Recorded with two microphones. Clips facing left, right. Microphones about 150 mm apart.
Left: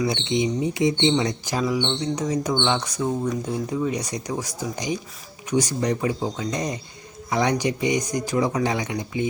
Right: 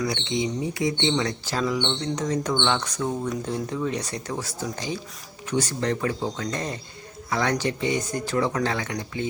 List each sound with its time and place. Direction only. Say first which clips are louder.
0.1 s speech: left 3 dB; 20° left (ahead or behind)